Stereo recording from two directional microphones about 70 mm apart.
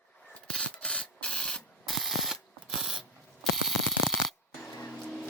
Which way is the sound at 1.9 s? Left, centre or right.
Centre.